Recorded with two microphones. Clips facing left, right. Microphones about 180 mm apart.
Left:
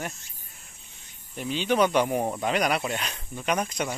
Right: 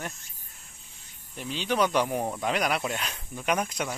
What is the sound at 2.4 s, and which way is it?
Speech, centre (ahead or behind).